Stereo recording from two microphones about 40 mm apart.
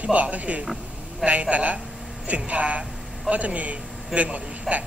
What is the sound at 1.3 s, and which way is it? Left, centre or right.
A man's voice, right.